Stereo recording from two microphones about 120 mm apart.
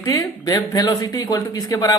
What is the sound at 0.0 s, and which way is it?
Speech, 30° left (ahead or behind).